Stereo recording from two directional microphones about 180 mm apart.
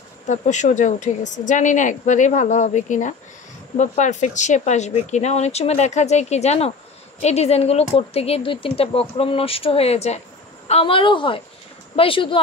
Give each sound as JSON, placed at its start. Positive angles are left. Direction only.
{"t": 0.3, "sound": "a woman's voice", "side_deg": 40}